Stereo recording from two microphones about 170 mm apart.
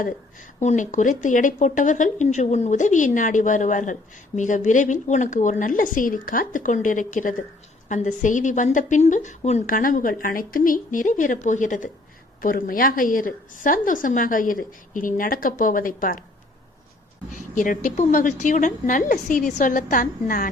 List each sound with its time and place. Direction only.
0.6 s a woman's voice: 45° left (ahead or behind)
17.5 s a woman's voice: 50° left (ahead or behind)